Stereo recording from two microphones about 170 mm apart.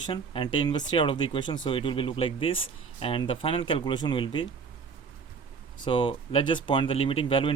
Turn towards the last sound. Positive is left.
turn(degrees=30)  # may be behind; listen again after turning